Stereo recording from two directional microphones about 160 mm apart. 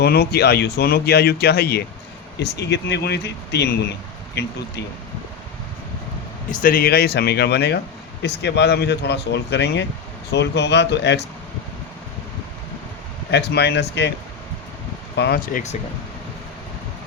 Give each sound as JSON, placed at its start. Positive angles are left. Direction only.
{"t": 0.0, "sound": "speech", "side_deg": 90}
{"t": 6.5, "sound": "speech", "side_deg": 60}
{"t": 13.3, "sound": "speech", "side_deg": 90}
{"t": 15.1, "sound": "speech", "side_deg": 85}